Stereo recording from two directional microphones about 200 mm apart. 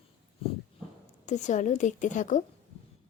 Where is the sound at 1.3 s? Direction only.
35° left (ahead or behind).